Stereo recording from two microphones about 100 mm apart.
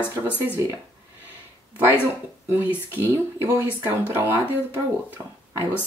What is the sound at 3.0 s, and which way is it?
Speech, 25° right (ahead or behind).